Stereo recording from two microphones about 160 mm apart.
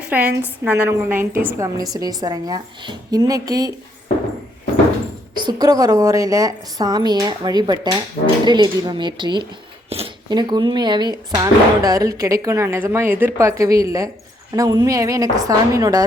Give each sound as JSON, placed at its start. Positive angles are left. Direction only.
{"t": 0.1, "sound": "a woman's voice", "side_deg": -10}
{"t": 1.3, "sound": "a woman's voice", "side_deg": -60}
{"t": 1.5, "sound": "speech", "side_deg": -20}
{"t": 5.4, "sound": "speech", "side_deg": -25}
{"t": 10.2, "sound": "speech", "side_deg": -25}